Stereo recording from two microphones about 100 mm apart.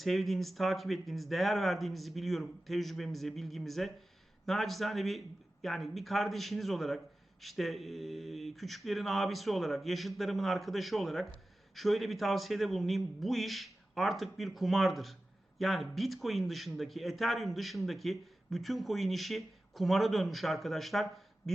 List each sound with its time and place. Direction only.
0.0 s speech: centre (ahead or behind)